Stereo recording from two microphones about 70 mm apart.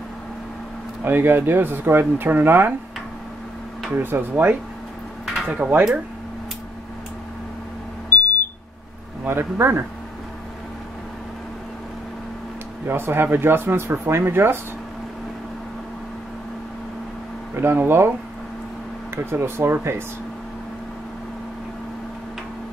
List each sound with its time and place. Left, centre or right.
1.0 s speech: right
3.9 s speech: right
5.2 s a sound: centre
5.5 s speech: centre
9.2 s speech: right
12.8 s speech: right
17.6 s speech: right
19.3 s speech: right